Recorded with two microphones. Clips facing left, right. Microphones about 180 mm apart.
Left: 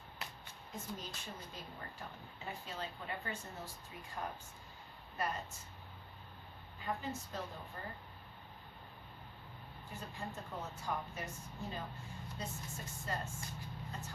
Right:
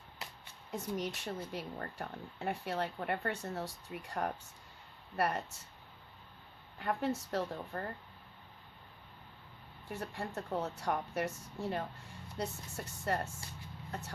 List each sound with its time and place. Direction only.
0.7 s speech: 75° right (ahead or behind)
6.7 s speech: 70° right (ahead or behind)
9.9 s speech: 75° right (ahead or behind)